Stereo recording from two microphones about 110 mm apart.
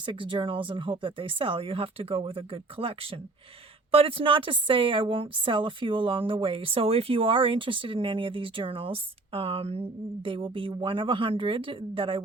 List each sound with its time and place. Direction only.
0.0 s a woman's voice: 50° right (ahead or behind)